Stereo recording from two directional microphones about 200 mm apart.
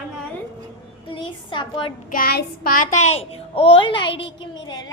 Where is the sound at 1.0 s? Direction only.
25° left (ahead or behind).